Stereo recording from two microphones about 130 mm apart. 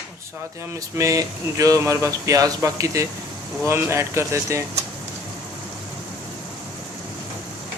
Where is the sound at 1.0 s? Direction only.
25° right (ahead or behind).